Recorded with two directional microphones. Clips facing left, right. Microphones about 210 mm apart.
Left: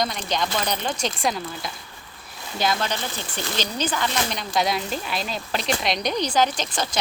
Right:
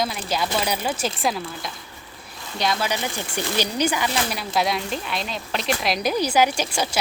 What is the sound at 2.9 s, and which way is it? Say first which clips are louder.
Speech: right 3 dB; 10° right (ahead or behind).